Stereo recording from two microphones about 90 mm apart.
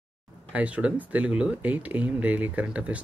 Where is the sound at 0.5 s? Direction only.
15° right (ahead or behind).